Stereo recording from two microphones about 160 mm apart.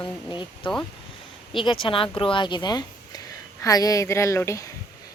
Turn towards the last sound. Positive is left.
turn(degrees=20)  # may be behind; listen again after turning